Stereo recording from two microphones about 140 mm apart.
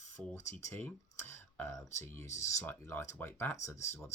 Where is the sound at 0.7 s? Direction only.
10° left (ahead or behind).